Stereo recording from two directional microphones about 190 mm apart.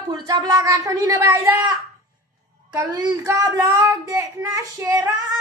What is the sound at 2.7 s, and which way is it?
Speech, 20° right (ahead or behind).